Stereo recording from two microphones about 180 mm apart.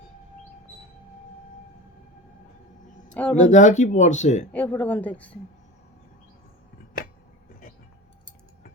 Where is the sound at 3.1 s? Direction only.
5° left (ahead or behind).